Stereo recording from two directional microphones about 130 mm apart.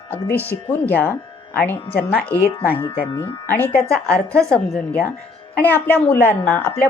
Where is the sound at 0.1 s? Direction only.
15° left (ahead or behind).